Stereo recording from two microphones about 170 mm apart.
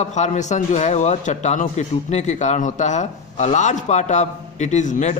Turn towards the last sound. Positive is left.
turn(degrees=45)  # may be behind; listen again after turning